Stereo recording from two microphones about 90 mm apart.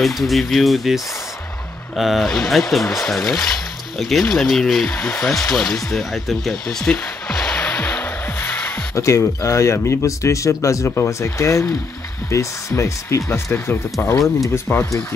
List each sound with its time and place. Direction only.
0.0 s speech: centre (ahead or behind)
5.5 s a sound: centre (ahead or behind)
8.9 s speech: 35° left (ahead or behind)
14.1 s speech: centre (ahead or behind)
14.5 s speech: 25° left (ahead or behind)